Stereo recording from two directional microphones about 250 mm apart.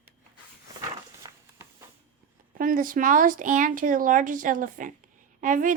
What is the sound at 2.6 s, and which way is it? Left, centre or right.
Speech, right.